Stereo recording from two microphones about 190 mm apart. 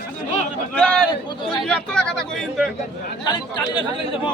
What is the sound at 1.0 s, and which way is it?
Speech, 25° left (ahead or behind).